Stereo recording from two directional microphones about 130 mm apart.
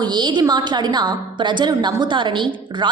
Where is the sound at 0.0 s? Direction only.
35° right (ahead or behind).